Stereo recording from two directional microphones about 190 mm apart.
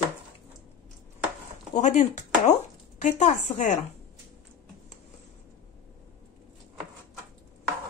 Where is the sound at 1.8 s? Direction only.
40° left (ahead or behind).